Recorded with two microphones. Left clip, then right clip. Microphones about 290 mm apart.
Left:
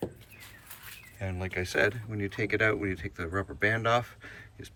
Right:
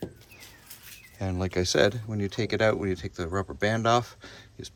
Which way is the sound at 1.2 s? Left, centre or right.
Centre.